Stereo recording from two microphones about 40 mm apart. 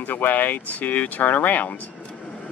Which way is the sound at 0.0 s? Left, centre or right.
Left.